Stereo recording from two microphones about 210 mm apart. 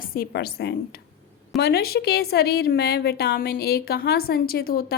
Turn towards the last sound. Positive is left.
turn(degrees=45)  # may be behind; listen again after turning